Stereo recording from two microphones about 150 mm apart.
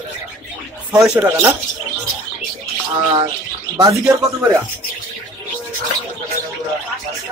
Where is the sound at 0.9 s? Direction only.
5° right (ahead or behind).